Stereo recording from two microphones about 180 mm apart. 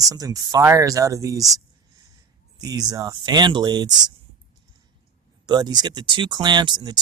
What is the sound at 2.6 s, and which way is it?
Speech, 20° right (ahead or behind).